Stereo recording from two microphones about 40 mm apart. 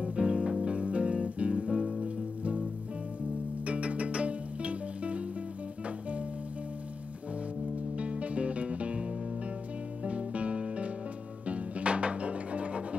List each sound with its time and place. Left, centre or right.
0.0 s music: right
3.6 s music: right
8.0 s music: right